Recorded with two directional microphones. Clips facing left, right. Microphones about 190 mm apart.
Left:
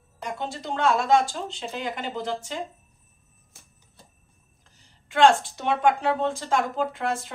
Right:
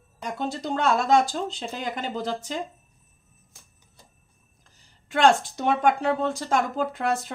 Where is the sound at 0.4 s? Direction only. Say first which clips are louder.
Right 1 dB; 40° right (ahead or behind).